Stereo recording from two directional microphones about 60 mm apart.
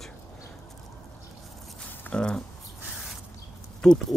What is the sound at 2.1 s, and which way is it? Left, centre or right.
Speech, centre.